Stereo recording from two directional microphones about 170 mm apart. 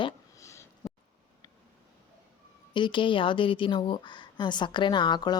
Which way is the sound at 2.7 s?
30° left (ahead or behind).